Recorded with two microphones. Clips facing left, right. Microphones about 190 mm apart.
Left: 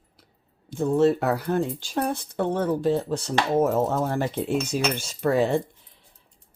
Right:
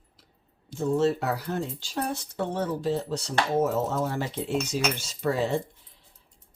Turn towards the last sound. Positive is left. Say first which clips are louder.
# left 5 dB
turn(degrees=55)  # may be behind; listen again after turning